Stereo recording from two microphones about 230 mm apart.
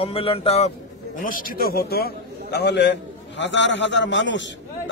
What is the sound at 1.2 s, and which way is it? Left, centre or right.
A man's voice, left.